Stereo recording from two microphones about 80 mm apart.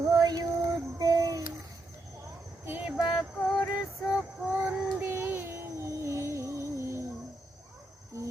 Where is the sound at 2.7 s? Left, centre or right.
Centre.